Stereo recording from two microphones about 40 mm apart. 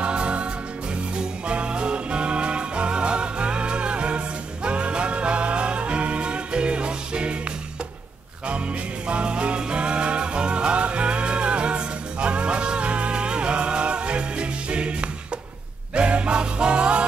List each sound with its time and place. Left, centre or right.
0.0 s music: right
9.0 s music: right